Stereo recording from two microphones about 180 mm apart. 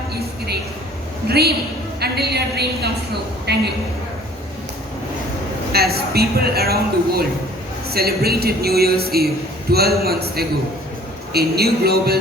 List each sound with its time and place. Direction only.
0.1 s a sound: 60° right (ahead or behind)
1.3 s a man's voice: 60° right (ahead or behind)
5.7 s a man's voice: 60° right (ahead or behind)